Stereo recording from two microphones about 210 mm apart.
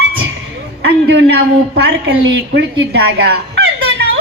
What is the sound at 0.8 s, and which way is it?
A woman's voice, 50° right (ahead or behind).